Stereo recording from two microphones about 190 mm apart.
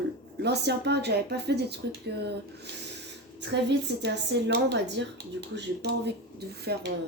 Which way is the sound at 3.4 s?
65° right (ahead or behind).